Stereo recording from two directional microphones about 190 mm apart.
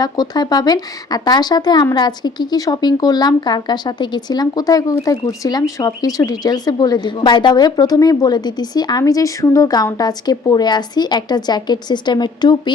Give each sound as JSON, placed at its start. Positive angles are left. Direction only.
{"t": 0.0, "sound": "speech", "side_deg": 20}